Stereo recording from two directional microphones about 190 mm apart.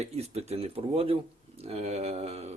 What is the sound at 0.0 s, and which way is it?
Speech, 35° right (ahead or behind).